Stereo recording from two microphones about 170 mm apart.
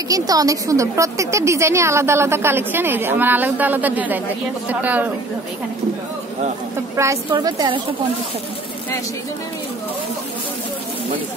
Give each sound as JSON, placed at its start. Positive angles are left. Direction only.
{"t": 0.1, "sound": "a woman's voice", "side_deg": -20}
{"t": 7.0, "sound": "a woman's voice", "side_deg": -20}